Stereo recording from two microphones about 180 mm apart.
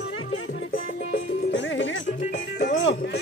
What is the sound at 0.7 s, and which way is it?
Music, 90° left.